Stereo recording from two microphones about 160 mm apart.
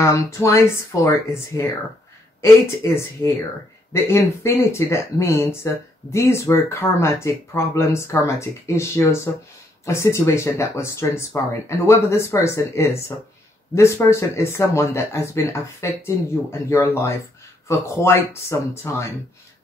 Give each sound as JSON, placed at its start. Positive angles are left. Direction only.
{"t": 0.0, "sound": "speech", "side_deg": 20}